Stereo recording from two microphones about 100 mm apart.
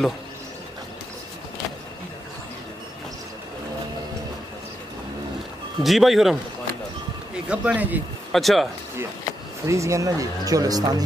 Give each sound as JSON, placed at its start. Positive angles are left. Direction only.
{"t": 5.9, "sound": "speech", "side_deg": 0}
{"t": 7.4, "sound": "speech", "side_deg": -10}
{"t": 8.3, "sound": "speech", "side_deg": 0}
{"t": 9.7, "sound": "speech", "side_deg": -30}